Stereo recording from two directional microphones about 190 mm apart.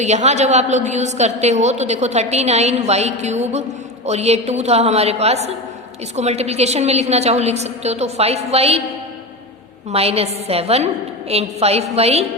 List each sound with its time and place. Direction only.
0.0 s a woman's voice: 35° right (ahead or behind)
9.9 s a woman's voice: 30° right (ahead or behind)